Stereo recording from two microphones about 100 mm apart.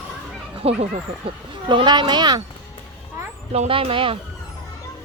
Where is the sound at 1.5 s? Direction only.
55° right (ahead or behind).